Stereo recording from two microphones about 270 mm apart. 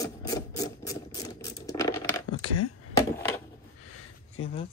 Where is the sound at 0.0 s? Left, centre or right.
Centre.